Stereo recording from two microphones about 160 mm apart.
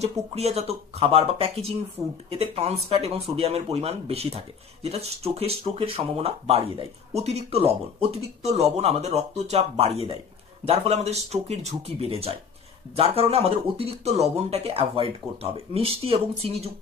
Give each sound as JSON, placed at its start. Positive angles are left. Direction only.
{"t": 0.0, "sound": "speech", "side_deg": -40}